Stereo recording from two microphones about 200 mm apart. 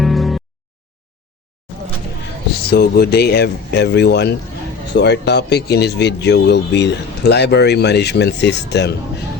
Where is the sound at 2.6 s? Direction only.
50° left (ahead or behind).